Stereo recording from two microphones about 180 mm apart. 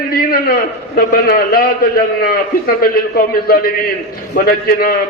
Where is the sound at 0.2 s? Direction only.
55° left (ahead or behind).